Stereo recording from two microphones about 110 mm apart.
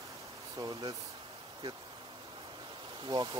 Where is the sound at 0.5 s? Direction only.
35° right (ahead or behind).